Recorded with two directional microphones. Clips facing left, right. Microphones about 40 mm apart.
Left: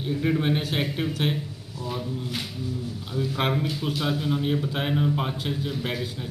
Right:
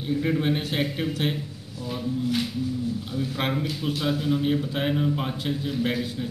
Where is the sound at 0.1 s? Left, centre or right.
Centre.